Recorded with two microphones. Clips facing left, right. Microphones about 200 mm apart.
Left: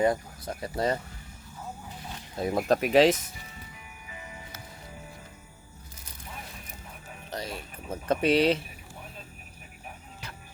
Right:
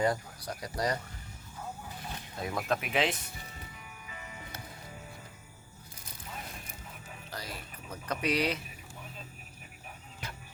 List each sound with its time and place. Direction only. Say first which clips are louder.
0.0 s speech: left 4 dB; 25° left (ahead or behind)
2.5 s speech: left 7 dB; 30° left (ahead or behind)
2.7 s speech: left 11 dB; 40° left (ahead or behind)
7.3 s a sound: left 7 dB; 25° left (ahead or behind)
8.0 s speech: left 8 dB; 30° left (ahead or behind)